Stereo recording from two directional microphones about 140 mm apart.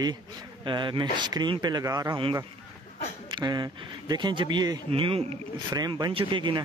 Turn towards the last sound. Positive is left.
turn(degrees=-35)  # may be behind; listen again after turning